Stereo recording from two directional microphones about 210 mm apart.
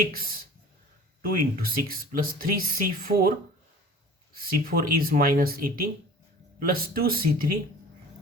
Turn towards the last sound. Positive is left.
turn(degrees=-45)  # may be behind; listen again after turning